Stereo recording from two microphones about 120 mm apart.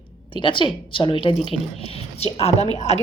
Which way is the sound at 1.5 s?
60° left (ahead or behind).